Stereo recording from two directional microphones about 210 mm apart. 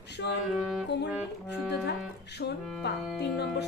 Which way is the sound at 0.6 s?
Centre (ahead or behind).